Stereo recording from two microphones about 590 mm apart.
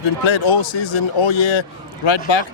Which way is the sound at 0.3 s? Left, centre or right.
Left.